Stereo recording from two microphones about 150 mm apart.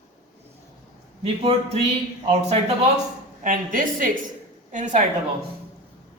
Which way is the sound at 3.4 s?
60° right (ahead or behind).